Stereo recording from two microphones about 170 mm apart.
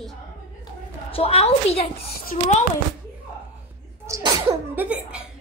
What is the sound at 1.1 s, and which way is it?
Speech, 35° left (ahead or behind).